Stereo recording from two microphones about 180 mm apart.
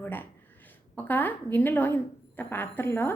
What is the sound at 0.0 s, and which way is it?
A woman's voice, 10° left (ahead or behind).